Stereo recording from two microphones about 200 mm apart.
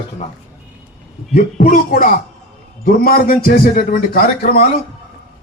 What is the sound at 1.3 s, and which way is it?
A man's voice, 40° left (ahead or behind).